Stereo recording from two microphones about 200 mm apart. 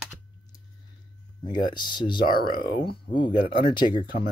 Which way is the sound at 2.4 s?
50° left (ahead or behind).